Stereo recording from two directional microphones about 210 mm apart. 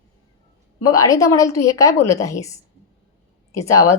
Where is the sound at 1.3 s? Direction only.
15° left (ahead or behind).